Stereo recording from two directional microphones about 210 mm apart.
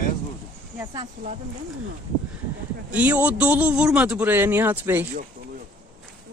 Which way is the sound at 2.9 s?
5° right (ahead or behind).